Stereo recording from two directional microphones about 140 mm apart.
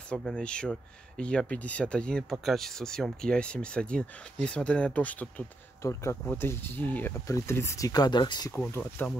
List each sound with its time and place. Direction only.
0.1 s speech: 5° left (ahead or behind)
5.8 s speech: 20° left (ahead or behind)
8.5 s speech: 10° left (ahead or behind)